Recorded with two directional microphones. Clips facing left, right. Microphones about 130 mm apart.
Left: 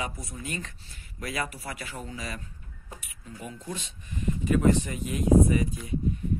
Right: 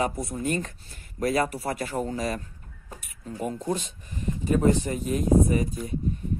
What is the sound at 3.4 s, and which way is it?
Speech, 45° right (ahead or behind).